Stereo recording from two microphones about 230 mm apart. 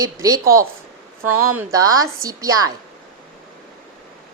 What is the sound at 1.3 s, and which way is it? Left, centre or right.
Speech, right.